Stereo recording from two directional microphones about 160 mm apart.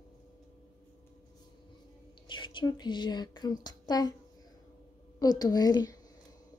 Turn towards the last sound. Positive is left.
turn(degrees=25)  # may be behind; listen again after turning